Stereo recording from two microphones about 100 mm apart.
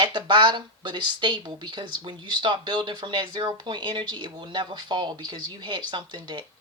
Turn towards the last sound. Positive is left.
turn(degrees=-50)  # may be behind; listen again after turning